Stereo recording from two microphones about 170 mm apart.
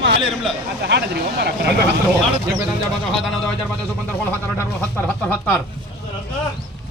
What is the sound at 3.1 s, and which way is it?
Speech, centre (ahead or behind).